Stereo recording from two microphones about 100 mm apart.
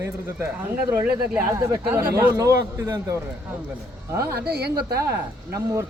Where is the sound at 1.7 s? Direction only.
30° right (ahead or behind).